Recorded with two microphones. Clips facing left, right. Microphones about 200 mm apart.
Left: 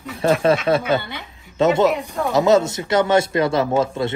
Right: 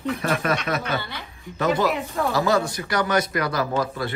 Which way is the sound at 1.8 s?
Centre (ahead or behind).